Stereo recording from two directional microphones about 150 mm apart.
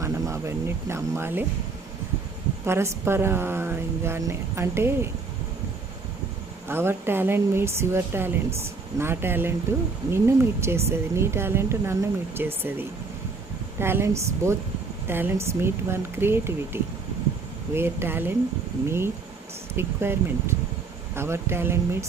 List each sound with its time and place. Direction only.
0.0 s speech: 20° right (ahead or behind)
2.6 s speech: 15° right (ahead or behind)
6.7 s speech: 15° right (ahead or behind)